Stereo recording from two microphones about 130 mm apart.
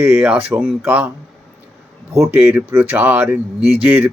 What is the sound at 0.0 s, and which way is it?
Speech, 15° right (ahead or behind).